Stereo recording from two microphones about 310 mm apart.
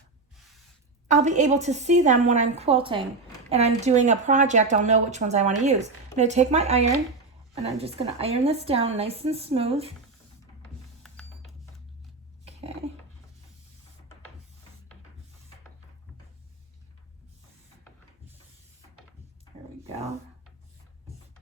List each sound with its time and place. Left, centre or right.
1.0 s speech: right
11.0 s music: centre
12.5 s a sound: centre